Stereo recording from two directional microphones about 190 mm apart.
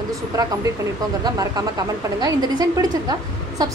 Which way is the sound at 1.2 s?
20° right (ahead or behind).